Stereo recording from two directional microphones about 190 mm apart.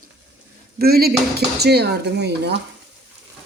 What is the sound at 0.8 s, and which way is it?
Speech, 55° right (ahead or behind).